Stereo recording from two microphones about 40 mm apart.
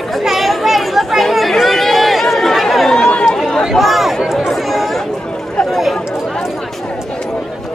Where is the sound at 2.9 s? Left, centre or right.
Centre.